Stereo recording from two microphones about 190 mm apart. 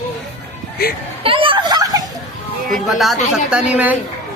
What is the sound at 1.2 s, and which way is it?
Children playing, 30° right (ahead or behind).